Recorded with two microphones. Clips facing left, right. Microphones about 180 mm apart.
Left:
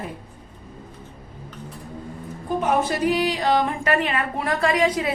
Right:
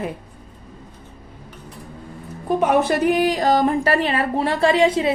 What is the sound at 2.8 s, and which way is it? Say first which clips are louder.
Speech: right 4 dB; 55° right (ahead or behind).